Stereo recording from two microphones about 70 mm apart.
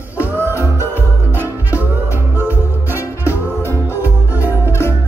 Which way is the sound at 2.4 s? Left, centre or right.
Right.